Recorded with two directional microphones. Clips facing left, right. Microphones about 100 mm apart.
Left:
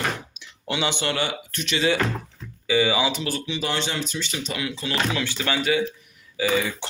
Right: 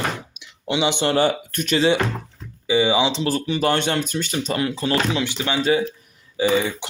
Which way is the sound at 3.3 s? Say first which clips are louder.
Right 7 dB; 45° right (ahead or behind).